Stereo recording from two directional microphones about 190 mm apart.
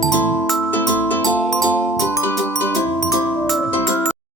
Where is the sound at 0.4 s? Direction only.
Centre (ahead or behind).